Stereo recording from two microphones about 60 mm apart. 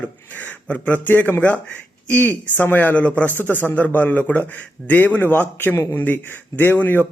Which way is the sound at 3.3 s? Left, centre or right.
Left.